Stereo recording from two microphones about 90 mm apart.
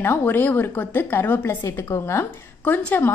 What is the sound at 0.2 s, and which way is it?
A woman's voice, 20° left (ahead or behind).